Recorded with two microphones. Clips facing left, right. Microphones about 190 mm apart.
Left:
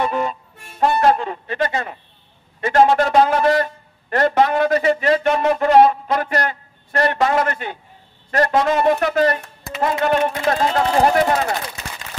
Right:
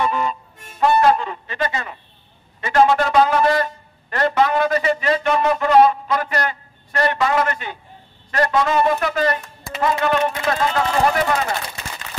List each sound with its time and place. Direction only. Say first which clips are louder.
0.0 s harmonica: even; 50° left (ahead or behind)
2.6 s a man's voice: left 1 dB; 45° left (ahead or behind)